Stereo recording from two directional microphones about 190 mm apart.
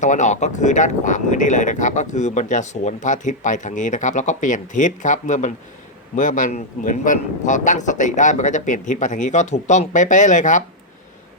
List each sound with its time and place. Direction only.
0.0 s speech: 40° left (ahead or behind)